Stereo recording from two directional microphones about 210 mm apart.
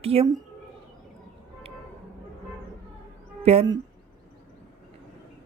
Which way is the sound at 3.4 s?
30° right (ahead or behind).